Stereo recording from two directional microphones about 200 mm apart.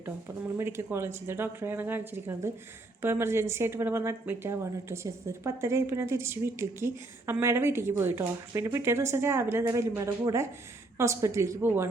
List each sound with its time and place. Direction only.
0.5 s speech: 10° right (ahead or behind)